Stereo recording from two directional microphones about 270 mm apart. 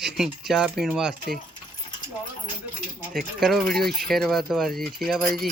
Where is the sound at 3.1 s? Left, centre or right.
Centre.